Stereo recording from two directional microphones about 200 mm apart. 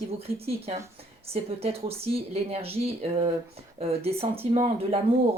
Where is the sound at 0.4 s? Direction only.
30° right (ahead or behind).